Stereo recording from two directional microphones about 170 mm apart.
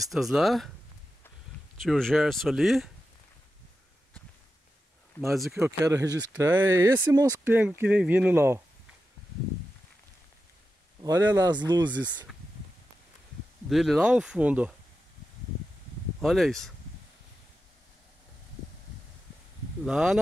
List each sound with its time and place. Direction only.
0.0 s speech: centre (ahead or behind)
1.8 s speech: 5° left (ahead or behind)
5.3 s speech: centre (ahead or behind)
5.6 s speech: 20° right (ahead or behind)
11.0 s speech: 20° right (ahead or behind)
13.7 s speech: centre (ahead or behind)
16.2 s speech: centre (ahead or behind)
19.8 s speech: 5° right (ahead or behind)